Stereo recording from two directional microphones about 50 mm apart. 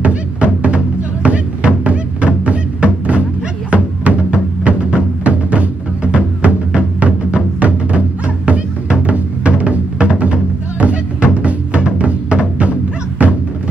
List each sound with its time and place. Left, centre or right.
0.0 s music: right